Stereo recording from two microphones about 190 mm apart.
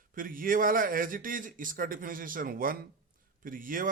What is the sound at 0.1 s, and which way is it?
Speech, 45° right (ahead or behind).